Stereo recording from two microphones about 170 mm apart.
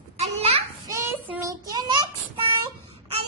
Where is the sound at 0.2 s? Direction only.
35° right (ahead or behind).